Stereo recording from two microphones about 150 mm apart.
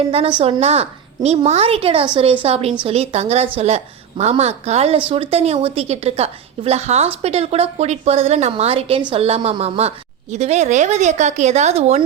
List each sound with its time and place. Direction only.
0.3 s a woman's voice: 40° right (ahead or behind)